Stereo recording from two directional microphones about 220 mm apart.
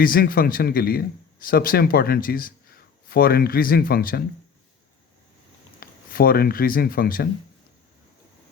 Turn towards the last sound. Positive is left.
turn(degrees=45)  # may be behind; listen again after turning